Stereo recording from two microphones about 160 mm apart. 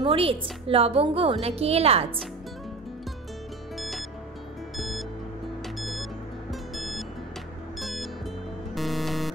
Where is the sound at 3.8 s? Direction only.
Centre (ahead or behind).